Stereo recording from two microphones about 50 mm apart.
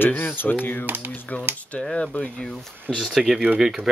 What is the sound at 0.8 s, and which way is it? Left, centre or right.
Speech, right.